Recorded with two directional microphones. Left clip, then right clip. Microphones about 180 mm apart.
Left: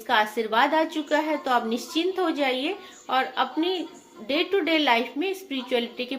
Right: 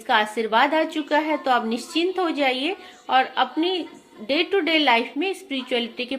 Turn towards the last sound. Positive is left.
turn(degrees=-45)  # may be behind; listen again after turning